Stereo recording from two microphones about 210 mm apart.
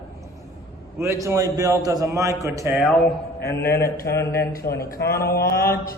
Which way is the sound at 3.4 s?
50° left (ahead or behind).